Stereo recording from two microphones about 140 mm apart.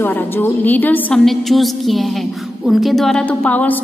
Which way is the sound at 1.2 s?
Centre (ahead or behind).